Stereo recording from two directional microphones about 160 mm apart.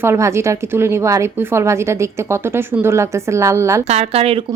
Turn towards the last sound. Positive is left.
turn(degrees=-40)  # may be behind; listen again after turning